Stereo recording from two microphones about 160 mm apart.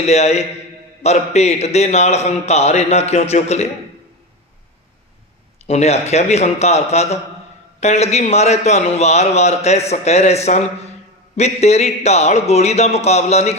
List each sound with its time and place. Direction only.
0.1 s a man's voice: 45° left (ahead or behind)
5.6 s a man's voice: 40° left (ahead or behind)